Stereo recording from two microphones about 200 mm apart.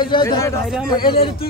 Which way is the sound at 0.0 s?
25° left (ahead or behind).